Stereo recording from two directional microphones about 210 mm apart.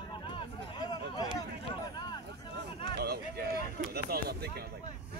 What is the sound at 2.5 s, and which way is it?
Speech, 45° right (ahead or behind).